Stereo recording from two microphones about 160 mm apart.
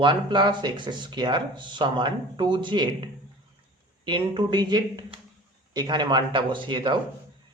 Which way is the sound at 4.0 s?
30° right (ahead or behind).